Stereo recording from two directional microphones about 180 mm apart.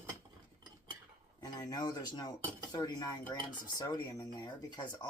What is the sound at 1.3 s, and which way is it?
Speech, 20° left (ahead or behind).